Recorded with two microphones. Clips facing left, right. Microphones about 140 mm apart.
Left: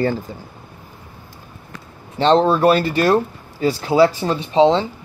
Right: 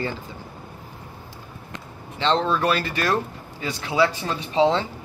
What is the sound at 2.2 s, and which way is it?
Speech, 40° left (ahead or behind).